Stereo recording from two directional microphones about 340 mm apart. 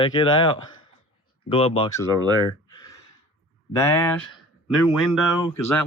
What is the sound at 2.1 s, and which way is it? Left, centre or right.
Speech, centre.